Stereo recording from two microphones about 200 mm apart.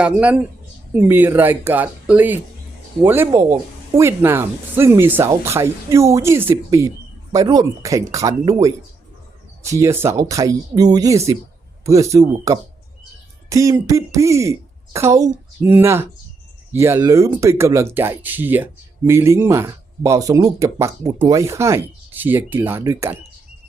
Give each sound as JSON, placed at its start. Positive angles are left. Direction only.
{"t": 0.0, "sound": "speech", "side_deg": -5}
{"t": 9.6, "sound": "speech", "side_deg": -15}